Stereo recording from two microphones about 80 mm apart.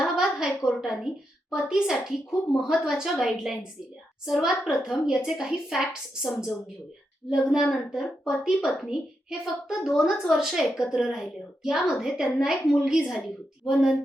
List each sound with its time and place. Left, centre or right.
0.0 s a woman's voice: centre